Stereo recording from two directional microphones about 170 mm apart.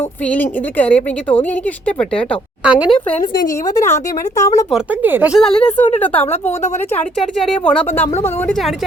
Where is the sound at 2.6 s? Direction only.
5° right (ahead or behind).